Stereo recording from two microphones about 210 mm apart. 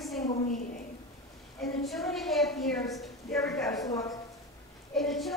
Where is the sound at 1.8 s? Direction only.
Centre (ahead or behind).